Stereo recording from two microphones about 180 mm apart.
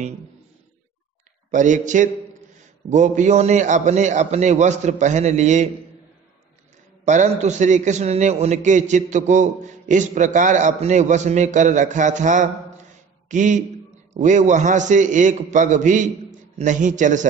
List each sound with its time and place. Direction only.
1.5 s a man's voice: 45° right (ahead or behind)
7.1 s a man's voice: 40° right (ahead or behind)